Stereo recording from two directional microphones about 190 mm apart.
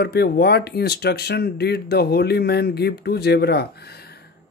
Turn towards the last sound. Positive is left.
turn(degrees=55)  # may be behind; listen again after turning